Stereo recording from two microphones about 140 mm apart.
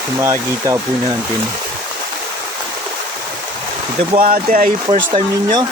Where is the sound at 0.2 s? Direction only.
20° right (ahead or behind).